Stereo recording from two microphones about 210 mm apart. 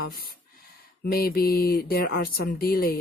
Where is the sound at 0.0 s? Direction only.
45° left (ahead or behind).